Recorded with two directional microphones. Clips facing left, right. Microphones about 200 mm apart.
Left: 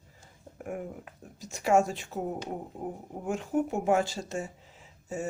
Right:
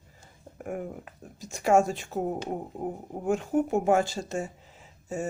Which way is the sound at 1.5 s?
45° right (ahead or behind).